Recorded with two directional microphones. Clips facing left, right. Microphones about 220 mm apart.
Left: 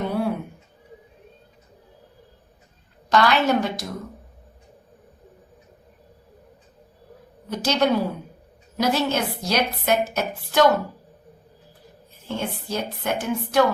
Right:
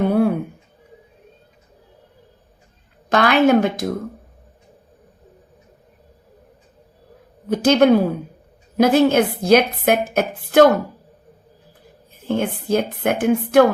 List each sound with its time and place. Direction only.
0.0 s music: 55° right (ahead or behind)
3.1 s a woman's voice: 55° right (ahead or behind)
7.5 s a woman's voice: 55° right (ahead or behind)
12.2 s speech: 55° right (ahead or behind)